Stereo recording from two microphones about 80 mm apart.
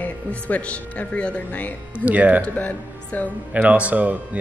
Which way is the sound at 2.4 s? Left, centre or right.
Left.